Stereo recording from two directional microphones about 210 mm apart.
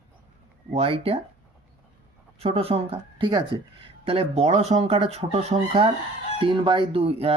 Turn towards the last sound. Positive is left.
turn(degrees=-25)  # may be behind; listen again after turning